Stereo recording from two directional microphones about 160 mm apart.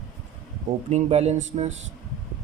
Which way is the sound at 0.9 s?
45° right (ahead or behind).